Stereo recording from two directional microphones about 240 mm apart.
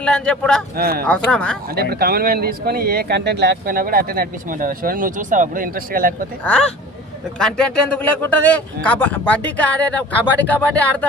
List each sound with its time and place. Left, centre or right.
0.0 s a man's voice: centre
0.8 s speech: right
1.3 s a man's voice: centre
1.7 s speech: right
6.4 s a man's voice: centre